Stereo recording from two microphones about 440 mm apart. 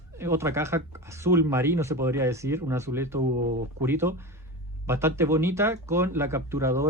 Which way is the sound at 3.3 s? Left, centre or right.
Centre.